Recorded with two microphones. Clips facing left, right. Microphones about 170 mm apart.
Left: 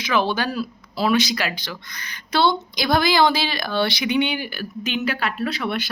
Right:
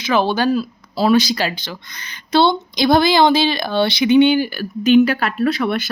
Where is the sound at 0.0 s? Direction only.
30° right (ahead or behind).